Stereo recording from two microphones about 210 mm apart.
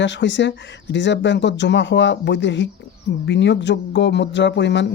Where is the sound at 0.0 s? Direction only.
60° left (ahead or behind).